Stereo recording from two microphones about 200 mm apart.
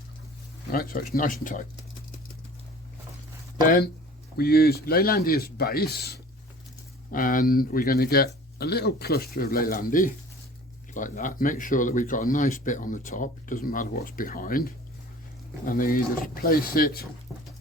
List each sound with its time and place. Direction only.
0.7 s speech: 45° left (ahead or behind)
4.4 s speech: 50° left (ahead or behind)